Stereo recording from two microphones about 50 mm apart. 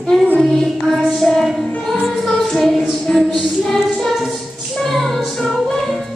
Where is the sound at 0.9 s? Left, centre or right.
Centre.